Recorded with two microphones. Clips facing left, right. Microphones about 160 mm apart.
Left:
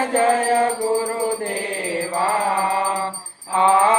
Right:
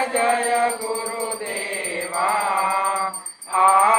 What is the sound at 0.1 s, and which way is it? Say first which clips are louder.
Music: left 5 dB; 40° left (ahead or behind).